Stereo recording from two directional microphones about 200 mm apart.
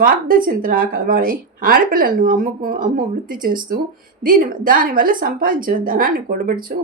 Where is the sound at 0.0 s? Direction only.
45° right (ahead or behind).